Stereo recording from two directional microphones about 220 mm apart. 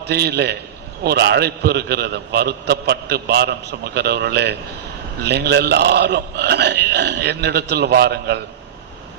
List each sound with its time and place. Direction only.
0.0 s a man's voice: 50° right (ahead or behind)